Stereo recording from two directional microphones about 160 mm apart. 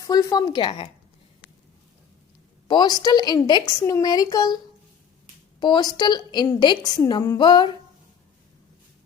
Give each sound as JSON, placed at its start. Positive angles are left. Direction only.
{"t": 0.0, "sound": "a woman's voice", "side_deg": 25}
{"t": 2.6, "sound": "a woman's voice", "side_deg": 25}
{"t": 5.5, "sound": "a woman's voice", "side_deg": 25}